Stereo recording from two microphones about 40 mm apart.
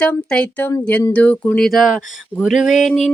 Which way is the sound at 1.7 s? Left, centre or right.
Centre.